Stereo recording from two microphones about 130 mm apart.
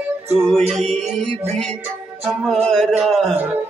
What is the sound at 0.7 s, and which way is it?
Music, 5° left (ahead or behind).